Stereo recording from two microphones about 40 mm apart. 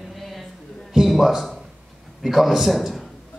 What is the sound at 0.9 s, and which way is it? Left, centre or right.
A man's voice, centre.